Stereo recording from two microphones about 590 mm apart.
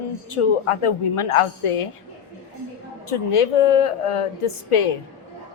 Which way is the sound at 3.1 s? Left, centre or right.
Left.